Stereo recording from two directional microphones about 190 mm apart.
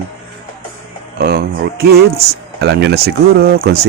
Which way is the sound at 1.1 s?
55° right (ahead or behind).